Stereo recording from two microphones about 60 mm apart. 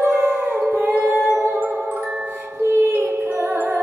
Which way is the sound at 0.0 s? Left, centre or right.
Right.